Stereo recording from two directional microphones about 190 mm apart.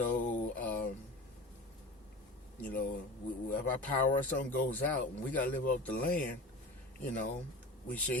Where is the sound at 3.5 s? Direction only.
10° left (ahead or behind).